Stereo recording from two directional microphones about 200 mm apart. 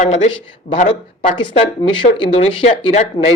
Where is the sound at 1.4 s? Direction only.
25° left (ahead or behind).